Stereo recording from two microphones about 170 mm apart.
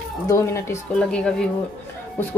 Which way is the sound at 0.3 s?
15° left (ahead or behind).